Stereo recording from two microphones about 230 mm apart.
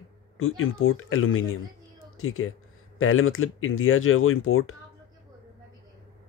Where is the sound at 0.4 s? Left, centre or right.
Left.